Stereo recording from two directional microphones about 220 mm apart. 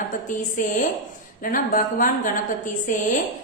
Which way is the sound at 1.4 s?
40° left (ahead or behind).